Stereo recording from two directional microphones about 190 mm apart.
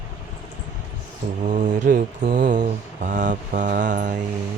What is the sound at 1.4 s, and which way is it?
Mantra, 40° right (ahead or behind).